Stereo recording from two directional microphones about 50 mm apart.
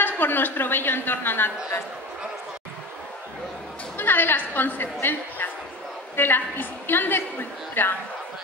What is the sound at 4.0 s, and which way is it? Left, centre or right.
A woman's voice, left.